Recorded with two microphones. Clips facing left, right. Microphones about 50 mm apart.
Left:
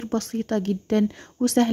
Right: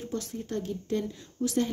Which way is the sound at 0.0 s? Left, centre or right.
Left.